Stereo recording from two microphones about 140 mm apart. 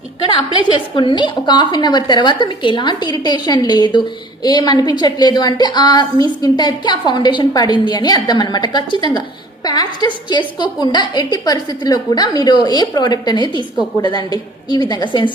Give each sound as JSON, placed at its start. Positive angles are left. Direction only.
{"t": 0.3, "sound": "a woman's voice", "side_deg": 40}